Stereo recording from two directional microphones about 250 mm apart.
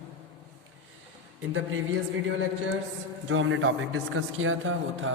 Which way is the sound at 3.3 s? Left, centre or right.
Right.